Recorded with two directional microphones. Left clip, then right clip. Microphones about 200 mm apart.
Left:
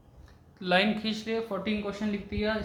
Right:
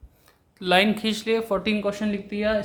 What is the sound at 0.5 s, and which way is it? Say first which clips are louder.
Speech: right 6 dB; 40° right (ahead or behind).